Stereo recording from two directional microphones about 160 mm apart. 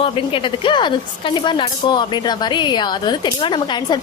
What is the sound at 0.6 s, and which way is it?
Speech, 30° left (ahead or behind).